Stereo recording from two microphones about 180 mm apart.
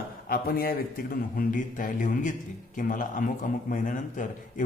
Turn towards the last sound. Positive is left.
turn(degrees=45)  # may be behind; listen again after turning